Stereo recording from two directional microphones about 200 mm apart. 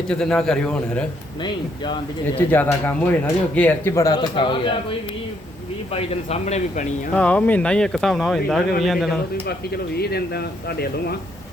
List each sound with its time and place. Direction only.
0.1 s speech: 5° left (ahead or behind)
1.4 s speech: 20° left (ahead or behind)
2.5 s speech: 10° left (ahead or behind); by 6.8 s 35° left (ahead or behind)
7.1 s speech: 5° left (ahead or behind)
9.5 s speech: 50° left (ahead or behind)